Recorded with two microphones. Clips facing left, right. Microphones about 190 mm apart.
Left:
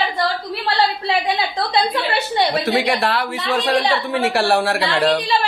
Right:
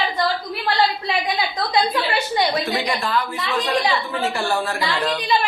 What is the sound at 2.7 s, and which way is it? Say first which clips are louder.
Speech: left 4 dB; 70° left (ahead or behind).